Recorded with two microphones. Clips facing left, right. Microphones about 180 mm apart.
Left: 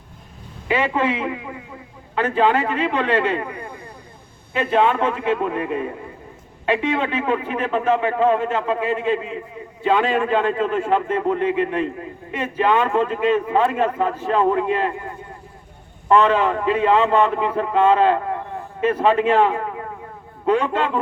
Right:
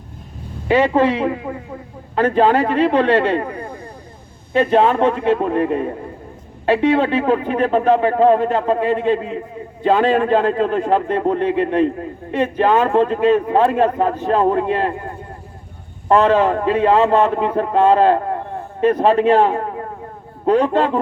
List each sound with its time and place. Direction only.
0.7 s a man's voice: 40° right (ahead or behind)